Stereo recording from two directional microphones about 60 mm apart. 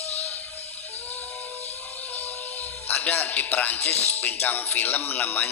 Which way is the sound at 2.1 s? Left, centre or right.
Left.